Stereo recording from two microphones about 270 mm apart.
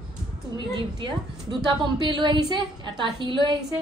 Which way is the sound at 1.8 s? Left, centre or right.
Centre.